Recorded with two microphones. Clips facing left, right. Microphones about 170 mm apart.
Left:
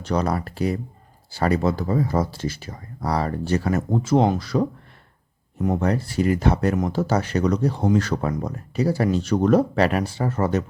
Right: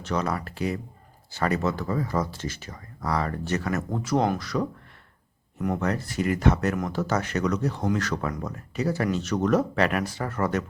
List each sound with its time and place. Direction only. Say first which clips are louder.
0.0 s speech: left 4 dB; 35° left (ahead or behind)